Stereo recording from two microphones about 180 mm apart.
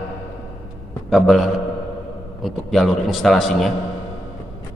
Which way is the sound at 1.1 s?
Centre (ahead or behind).